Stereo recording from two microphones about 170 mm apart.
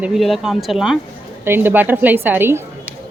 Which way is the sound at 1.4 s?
10° right (ahead or behind).